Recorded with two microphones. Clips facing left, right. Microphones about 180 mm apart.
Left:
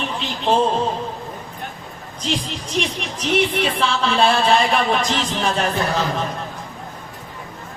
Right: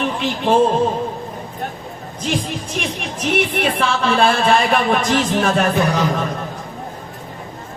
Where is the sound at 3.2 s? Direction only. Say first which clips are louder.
Even; 55° right (ahead or behind).